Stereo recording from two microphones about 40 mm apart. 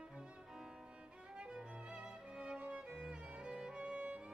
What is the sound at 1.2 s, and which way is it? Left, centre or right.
Music, right.